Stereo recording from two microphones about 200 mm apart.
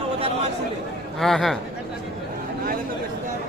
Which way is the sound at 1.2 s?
Centre (ahead or behind).